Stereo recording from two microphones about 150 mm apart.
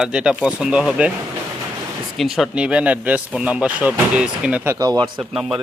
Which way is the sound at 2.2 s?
Centre (ahead or behind).